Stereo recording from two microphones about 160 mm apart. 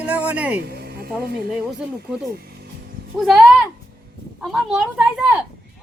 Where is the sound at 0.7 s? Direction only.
70° right (ahead or behind).